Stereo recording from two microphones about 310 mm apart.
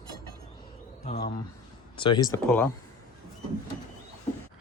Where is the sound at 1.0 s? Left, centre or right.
Left.